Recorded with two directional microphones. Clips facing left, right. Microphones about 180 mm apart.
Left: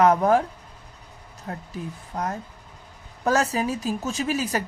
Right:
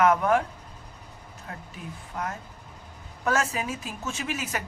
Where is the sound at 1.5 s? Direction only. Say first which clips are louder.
Left 7 dB; 35° left (ahead or behind).